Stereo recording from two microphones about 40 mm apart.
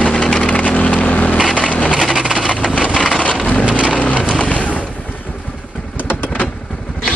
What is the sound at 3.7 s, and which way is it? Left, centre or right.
Rain, right.